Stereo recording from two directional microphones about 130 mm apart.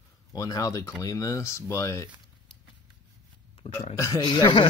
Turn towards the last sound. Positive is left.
turn(degrees=35)  # may be behind; listen again after turning